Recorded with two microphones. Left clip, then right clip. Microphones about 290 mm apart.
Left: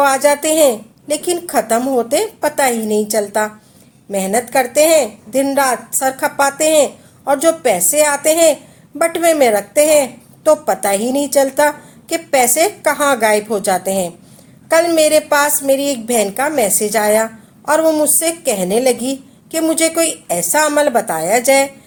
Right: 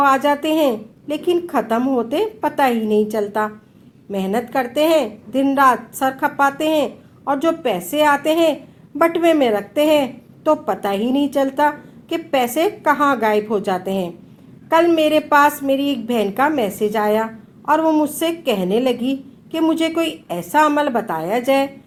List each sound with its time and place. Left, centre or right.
0.0 s a woman's voice: left